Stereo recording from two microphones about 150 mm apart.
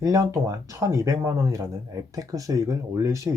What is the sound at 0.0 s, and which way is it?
Speech, 20° right (ahead or behind).